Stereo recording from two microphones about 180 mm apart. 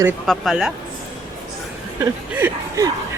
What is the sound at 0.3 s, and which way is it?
Speech, centre (ahead or behind).